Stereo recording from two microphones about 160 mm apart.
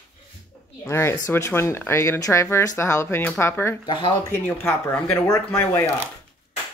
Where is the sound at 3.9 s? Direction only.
30° left (ahead or behind).